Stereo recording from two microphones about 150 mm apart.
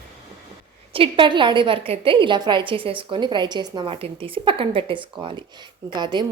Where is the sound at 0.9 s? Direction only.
35° right (ahead or behind).